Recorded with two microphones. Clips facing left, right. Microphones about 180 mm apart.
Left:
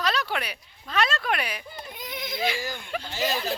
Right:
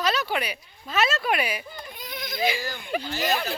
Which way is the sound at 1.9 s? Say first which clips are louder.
Left 2 dB; 20° left (ahead or behind).